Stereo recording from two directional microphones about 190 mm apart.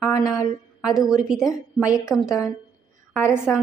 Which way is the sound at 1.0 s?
5° right (ahead or behind).